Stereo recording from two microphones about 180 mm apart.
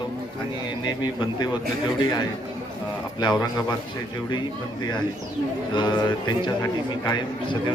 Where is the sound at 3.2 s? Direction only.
25° left (ahead or behind).